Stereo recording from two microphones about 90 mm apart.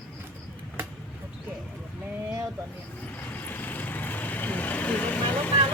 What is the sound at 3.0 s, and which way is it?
Vehicle, 20° left (ahead or behind).